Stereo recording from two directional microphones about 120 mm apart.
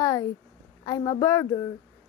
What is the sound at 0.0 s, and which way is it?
A woman's voice, 30° left (ahead or behind).